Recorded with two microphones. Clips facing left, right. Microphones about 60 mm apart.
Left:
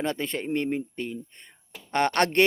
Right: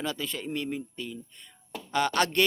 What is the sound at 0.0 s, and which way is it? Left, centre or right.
Speech, left.